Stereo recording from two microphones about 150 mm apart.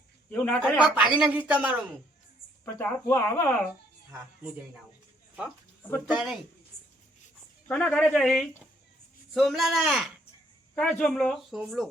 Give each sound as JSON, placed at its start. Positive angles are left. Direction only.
{"t": 0.3, "sound": "speech", "side_deg": 10}
{"t": 0.9, "sound": "speech", "side_deg": -10}
{"t": 2.7, "sound": "speech", "side_deg": 15}
{"t": 6.1, "sound": "speech", "side_deg": -5}
{"t": 7.7, "sound": "speech", "side_deg": 10}